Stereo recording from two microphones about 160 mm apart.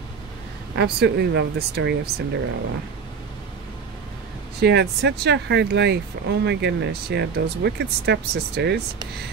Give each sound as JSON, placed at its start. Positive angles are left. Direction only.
{"t": 0.7, "sound": "speech", "side_deg": -90}
{"t": 4.6, "sound": "speech", "side_deg": -90}